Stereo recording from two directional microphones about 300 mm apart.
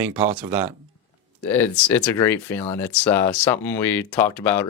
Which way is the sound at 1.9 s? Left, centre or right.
Centre.